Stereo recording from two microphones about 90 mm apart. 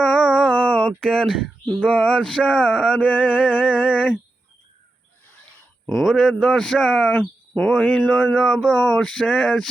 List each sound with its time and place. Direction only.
0.0 s a sound: 5° right (ahead or behind)
0.4 s a sound: 15° left (ahead or behind)
1.0 s a man's voice: 5° left (ahead or behind)
1.6 s speech: 15° left (ahead or behind)
3.2 s music: 10° right (ahead or behind)
6.0 s a man's voice: centre (ahead or behind)
7.1 s a man's voice: 15° left (ahead or behind)